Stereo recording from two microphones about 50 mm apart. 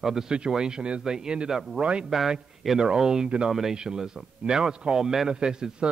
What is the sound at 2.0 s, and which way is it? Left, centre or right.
A man's voice, centre.